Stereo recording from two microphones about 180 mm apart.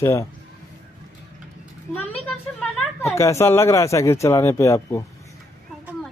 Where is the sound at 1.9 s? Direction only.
10° left (ahead or behind).